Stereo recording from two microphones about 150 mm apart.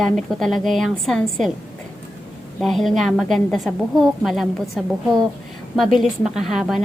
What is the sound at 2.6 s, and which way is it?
A woman's voice, centre (ahead or behind).